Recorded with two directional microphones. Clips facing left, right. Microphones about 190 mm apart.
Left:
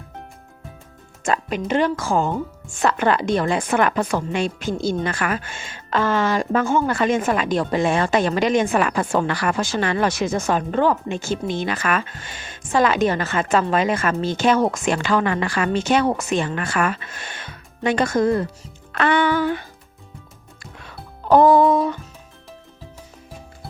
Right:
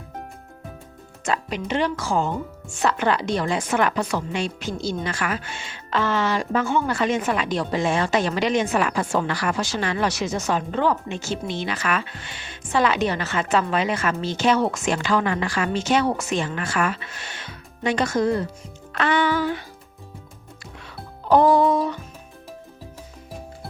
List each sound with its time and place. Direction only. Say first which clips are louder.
1.2 s speech: left 3 dB; 50° left (ahead or behind)
18.9 s music: left 3 dB; 55° left (ahead or behind)
20.8 s music: left 2 dB; 50° left (ahead or behind)